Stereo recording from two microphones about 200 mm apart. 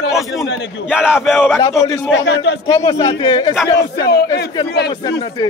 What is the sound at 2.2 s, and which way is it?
Speech, 60° left (ahead or behind).